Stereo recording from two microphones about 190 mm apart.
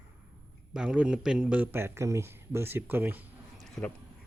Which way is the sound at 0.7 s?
5° right (ahead or behind).